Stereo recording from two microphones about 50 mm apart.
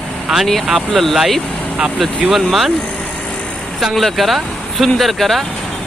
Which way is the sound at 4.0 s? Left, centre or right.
Centre.